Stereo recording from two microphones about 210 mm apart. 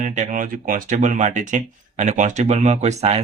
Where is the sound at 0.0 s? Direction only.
35° right (ahead or behind).